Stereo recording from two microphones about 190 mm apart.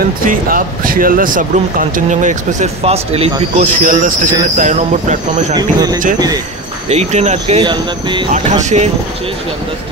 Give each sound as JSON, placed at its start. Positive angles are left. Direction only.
{"t": 0.3, "sound": "speech", "side_deg": -45}
{"t": 5.5, "sound": "speech", "side_deg": -20}
{"t": 6.9, "sound": "speech", "side_deg": -35}
{"t": 8.3, "sound": "speech", "side_deg": -40}